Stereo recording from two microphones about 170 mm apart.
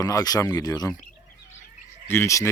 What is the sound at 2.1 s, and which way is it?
Speech, 15° left (ahead or behind).